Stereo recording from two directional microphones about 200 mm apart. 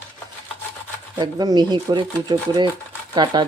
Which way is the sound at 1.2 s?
20° right (ahead or behind).